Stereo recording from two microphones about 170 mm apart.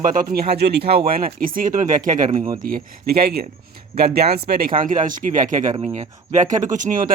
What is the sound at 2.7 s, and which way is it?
Speech, 60° right (ahead or behind).